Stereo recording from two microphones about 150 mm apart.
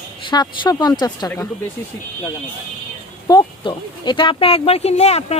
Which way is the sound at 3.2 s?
30° left (ahead or behind).